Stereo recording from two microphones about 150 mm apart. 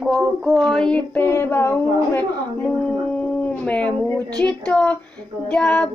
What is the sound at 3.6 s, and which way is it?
A woman's voice, 10° left (ahead or behind).